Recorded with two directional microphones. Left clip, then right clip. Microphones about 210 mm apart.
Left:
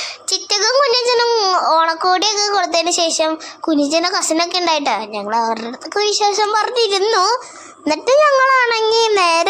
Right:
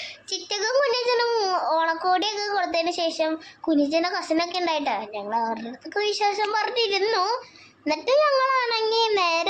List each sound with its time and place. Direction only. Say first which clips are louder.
0.3 s a child's voice: left 10 dB; 15° left (ahead or behind)